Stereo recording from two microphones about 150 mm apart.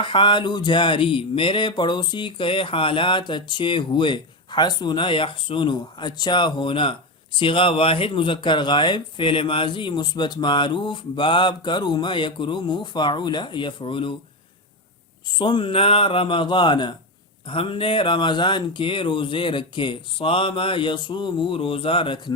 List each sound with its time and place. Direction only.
0.0 s speech: 30° left (ahead or behind)
15.3 s speech: 30° left (ahead or behind)